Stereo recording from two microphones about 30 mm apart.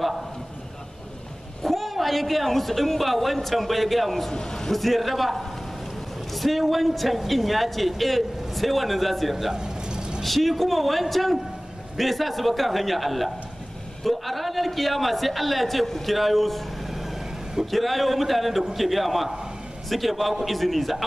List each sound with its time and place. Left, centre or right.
1.6 s a man's voice: centre
4.3 s a man's voice: left
4.7 s speech: centre
9.5 s a sound: right
10.2 s speech: centre
17.6 s speech: centre